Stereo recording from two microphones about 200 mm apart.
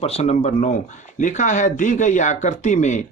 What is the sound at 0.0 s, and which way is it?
Speech, 30° left (ahead or behind).